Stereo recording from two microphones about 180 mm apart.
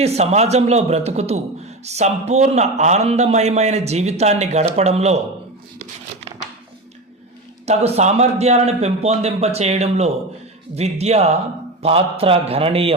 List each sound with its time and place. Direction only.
0.0 s a man's voice: 35° right (ahead or behind)
7.6 s a man's voice: 35° right (ahead or behind)